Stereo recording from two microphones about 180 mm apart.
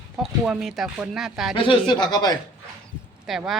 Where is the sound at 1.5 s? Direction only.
30° left (ahead or behind).